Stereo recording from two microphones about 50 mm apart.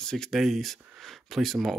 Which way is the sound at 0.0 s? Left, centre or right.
Centre.